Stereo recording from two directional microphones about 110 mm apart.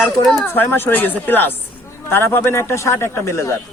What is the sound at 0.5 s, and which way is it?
Speech, 20° left (ahead or behind).